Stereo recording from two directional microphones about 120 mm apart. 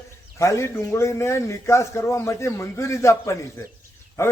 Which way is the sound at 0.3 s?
25° left (ahead or behind).